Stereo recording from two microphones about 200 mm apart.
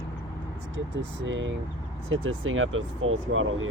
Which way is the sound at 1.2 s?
70° right (ahead or behind).